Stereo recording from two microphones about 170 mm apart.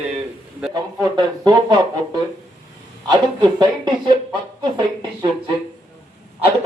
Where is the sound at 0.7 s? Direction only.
25° right (ahead or behind).